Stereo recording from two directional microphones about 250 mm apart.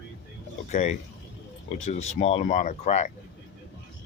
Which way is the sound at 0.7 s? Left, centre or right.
Left.